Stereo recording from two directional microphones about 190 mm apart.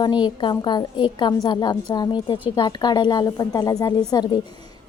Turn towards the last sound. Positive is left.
turn(degrees=20)  # may be behind; listen again after turning